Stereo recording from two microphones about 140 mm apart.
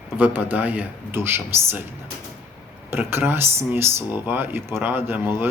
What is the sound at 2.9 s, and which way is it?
Speech, 15° right (ahead or behind).